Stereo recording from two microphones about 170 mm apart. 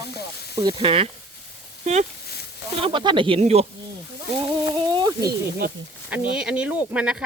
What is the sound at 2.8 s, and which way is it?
Speech, 30° right (ahead or behind).